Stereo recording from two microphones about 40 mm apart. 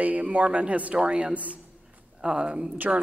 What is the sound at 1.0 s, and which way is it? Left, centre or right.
Speech, right.